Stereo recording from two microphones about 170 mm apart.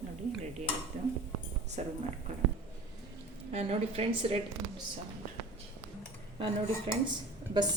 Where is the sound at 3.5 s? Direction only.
35° right (ahead or behind).